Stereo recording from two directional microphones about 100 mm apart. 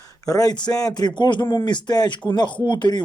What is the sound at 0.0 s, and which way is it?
A man's voice, 35° left (ahead or behind).